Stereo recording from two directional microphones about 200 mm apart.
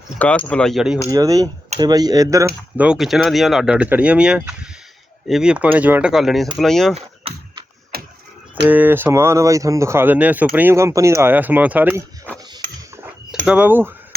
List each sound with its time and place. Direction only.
0.2 s speech: 5° left (ahead or behind)
1.0 s speech: 15° right (ahead or behind)
2.7 s speech: 5° right (ahead or behind)
7.9 s a sound: 50° right (ahead or behind)
8.6 s speech: 10° right (ahead or behind)
13.4 s speech: 5° right (ahead or behind)